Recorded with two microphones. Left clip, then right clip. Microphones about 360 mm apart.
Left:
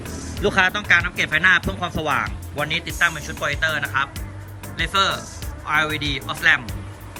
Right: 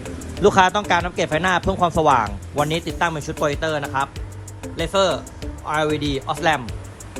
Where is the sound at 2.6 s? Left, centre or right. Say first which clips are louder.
Left 1 dB; centre.